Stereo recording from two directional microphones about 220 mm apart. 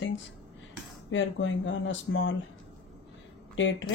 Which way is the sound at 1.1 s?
60° left (ahead or behind).